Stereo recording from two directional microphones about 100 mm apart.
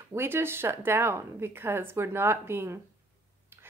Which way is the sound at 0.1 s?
25° right (ahead or behind).